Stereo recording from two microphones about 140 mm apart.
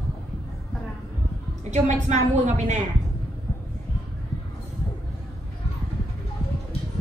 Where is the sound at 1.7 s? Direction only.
55° right (ahead or behind).